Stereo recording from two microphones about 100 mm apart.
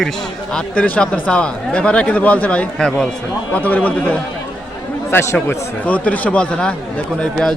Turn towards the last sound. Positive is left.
turn(degrees=10)  # may be behind; listen again after turning